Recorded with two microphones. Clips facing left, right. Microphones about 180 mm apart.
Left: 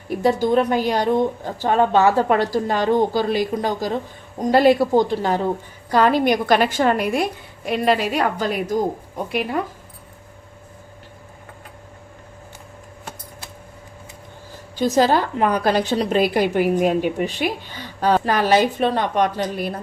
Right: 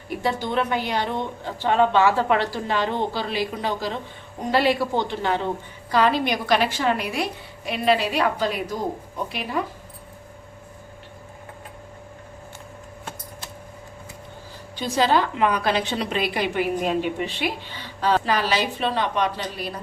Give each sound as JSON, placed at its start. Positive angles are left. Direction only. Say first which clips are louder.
{"t": 0.2, "sound": "a woman's voice", "louder": "left 7 dB", "side_deg": 40}
{"t": 14.8, "sound": "a woman's voice", "louder": "left 4 dB", "side_deg": 45}